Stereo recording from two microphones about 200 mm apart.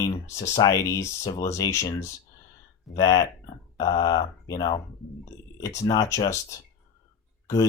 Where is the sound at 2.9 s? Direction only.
20° left (ahead or behind).